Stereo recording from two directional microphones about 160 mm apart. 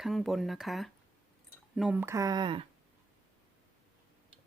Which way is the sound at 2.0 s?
20° right (ahead or behind).